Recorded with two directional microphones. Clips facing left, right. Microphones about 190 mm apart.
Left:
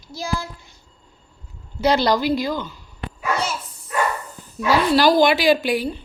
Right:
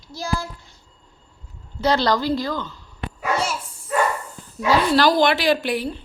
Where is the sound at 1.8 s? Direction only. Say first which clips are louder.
Left 2 dB; 10° left (ahead or behind).